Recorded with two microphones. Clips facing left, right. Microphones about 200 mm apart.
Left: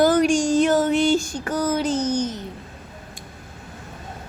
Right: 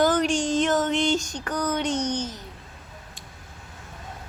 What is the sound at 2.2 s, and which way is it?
Babbling, 20° left (ahead or behind).